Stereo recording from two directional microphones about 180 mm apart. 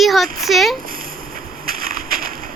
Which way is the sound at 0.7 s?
50° right (ahead or behind).